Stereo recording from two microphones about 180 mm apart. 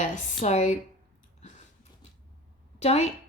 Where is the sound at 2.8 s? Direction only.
35° left (ahead or behind).